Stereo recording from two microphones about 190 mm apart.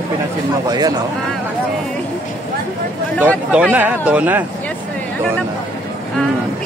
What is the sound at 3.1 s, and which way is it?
Speech, 5° right (ahead or behind).